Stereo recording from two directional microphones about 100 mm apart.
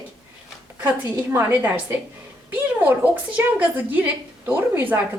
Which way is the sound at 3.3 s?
15° right (ahead or behind).